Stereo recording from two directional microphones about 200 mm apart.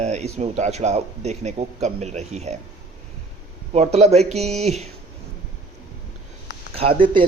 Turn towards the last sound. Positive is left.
turn(degrees=-25)  # may be behind; listen again after turning